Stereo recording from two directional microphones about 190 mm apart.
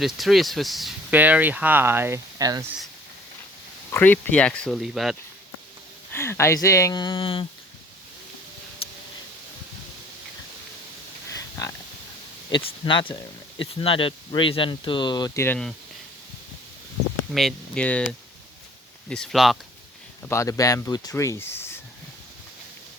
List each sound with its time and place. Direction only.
0.0 s speech: centre (ahead or behind); by 2.6 s 15° right (ahead or behind)
3.9 s speech: 10° left (ahead or behind)
6.1 s speech: 15° left (ahead or behind)
11.3 s a sound: 20° left (ahead or behind)
12.5 s speech: 25° left (ahead or behind)
15.4 s speech: 5° left (ahead or behind)
17.3 s speech: 5° left (ahead or behind)
19.0 s speech: 5° left (ahead or behind)
20.2 s speech: 15° left (ahead or behind)